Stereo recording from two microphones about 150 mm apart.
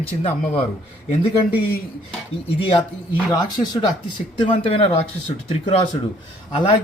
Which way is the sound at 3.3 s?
30° left (ahead or behind).